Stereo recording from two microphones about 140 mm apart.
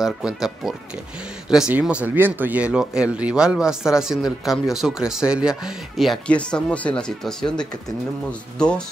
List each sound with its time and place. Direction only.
0.0 s speech: 5° right (ahead or behind)